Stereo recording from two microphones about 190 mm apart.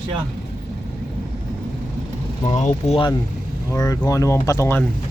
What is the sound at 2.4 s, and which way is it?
Speech, 40° left (ahead or behind).